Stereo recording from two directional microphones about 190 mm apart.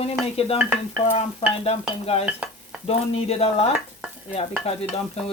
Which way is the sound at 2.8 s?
30° left (ahead or behind).